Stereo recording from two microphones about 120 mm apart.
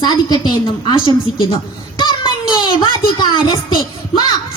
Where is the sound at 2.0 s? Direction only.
40° left (ahead or behind).